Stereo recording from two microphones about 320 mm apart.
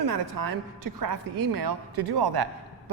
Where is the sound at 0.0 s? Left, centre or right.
Right.